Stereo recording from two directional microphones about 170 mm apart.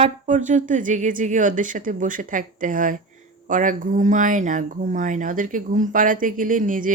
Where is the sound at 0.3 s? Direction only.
45° right (ahead or behind).